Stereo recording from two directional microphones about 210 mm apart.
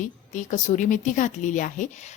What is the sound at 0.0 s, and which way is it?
A woman's voice, 35° left (ahead or behind).